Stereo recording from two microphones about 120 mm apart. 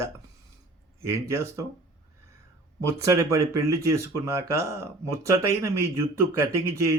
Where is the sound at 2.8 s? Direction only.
25° right (ahead or behind).